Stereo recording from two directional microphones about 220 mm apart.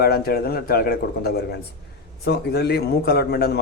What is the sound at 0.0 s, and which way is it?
Speech, 45° left (ahead or behind).